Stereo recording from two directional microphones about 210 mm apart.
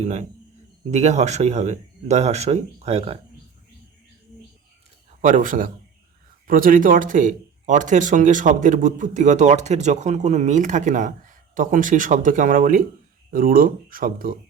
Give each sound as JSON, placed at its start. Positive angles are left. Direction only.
{"t": 0.9, "sound": "speech", "side_deg": -30}
{"t": 5.2, "sound": "speech", "side_deg": -40}